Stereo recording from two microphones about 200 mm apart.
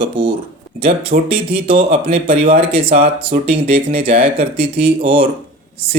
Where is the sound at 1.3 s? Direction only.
25° right (ahead or behind).